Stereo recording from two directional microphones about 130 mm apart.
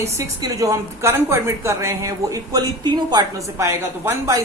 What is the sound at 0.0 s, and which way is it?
A woman's voice, 25° right (ahead or behind).